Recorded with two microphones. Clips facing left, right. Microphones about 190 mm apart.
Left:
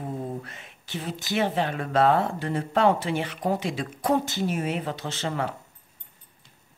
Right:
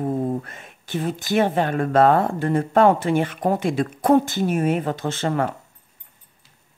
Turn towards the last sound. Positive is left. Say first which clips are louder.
# right 6 dB
turn(degrees=-50)  # may be behind; listen again after turning